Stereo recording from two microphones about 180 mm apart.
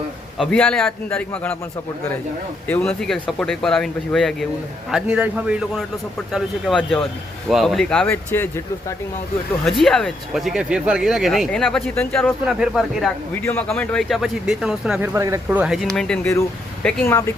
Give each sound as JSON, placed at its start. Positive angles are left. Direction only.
{"t": 0.3, "sound": "a man's voice", "side_deg": 5}
{"t": 2.6, "sound": "a man's voice", "side_deg": 10}
{"t": 9.8, "sound": "speech", "side_deg": 0}
{"t": 13.3, "sound": "speech", "side_deg": 10}
{"t": 15.1, "sound": "a man's voice", "side_deg": -15}